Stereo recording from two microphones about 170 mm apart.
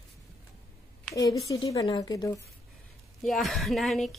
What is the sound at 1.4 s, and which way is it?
Speech, 25° left (ahead or behind).